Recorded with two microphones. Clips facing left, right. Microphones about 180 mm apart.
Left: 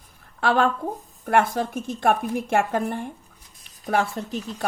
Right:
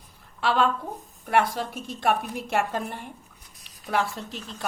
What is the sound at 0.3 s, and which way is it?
A woman's voice, 50° left (ahead or behind).